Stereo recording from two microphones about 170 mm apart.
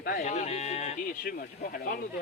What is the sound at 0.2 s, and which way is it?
Speech, 40° left (ahead or behind).